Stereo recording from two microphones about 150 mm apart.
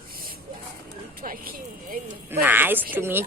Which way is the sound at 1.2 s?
70° right (ahead or behind).